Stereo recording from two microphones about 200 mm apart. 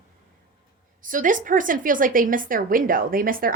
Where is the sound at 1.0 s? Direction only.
40° right (ahead or behind).